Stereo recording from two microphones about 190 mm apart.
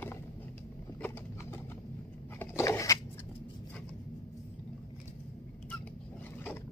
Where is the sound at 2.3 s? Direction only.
15° left (ahead or behind).